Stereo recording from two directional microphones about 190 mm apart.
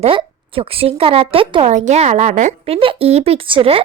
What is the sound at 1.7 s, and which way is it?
Speech, 40° right (ahead or behind).